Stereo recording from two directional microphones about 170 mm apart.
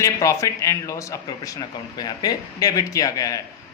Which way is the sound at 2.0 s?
25° left (ahead or behind).